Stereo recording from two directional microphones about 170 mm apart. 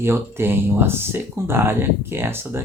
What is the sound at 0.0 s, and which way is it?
Speech, 15° right (ahead or behind).